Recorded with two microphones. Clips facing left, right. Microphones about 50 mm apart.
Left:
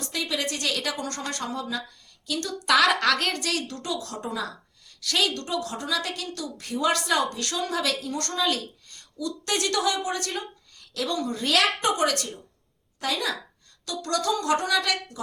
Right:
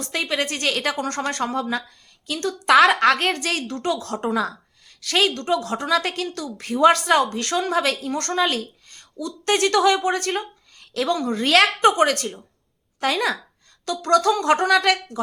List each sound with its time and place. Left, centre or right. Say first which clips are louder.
0.1 s a woman's voice: right 5 dB; right
4.9 s a woman's voice: right 5 dB; right